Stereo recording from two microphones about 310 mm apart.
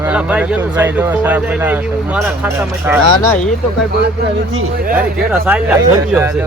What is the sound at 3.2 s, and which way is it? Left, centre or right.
Speech, centre.